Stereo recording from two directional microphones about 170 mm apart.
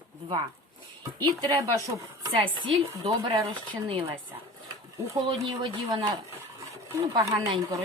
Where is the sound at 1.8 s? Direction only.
25° right (ahead or behind).